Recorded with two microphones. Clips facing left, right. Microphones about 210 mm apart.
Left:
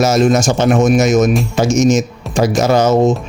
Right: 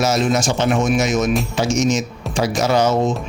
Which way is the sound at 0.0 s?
45° left (ahead or behind).